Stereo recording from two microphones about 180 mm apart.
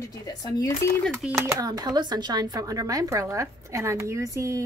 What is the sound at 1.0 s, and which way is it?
Speech, centre (ahead or behind).